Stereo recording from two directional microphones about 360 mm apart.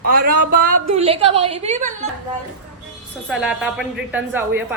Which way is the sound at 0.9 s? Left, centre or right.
Centre.